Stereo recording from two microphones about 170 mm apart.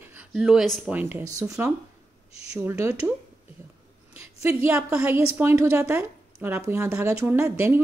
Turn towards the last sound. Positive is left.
turn(degrees=-15)  # may be behind; listen again after turning